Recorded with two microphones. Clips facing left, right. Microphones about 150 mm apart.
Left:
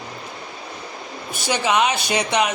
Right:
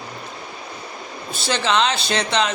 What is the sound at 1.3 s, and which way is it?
Speech, 15° left (ahead or behind).